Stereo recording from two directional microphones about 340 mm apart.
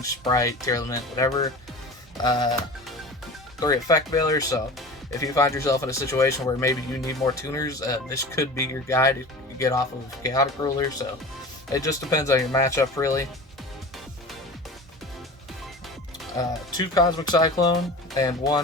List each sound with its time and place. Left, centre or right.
0.0 s speech: centre
3.6 s speech: centre
16.4 s speech: centre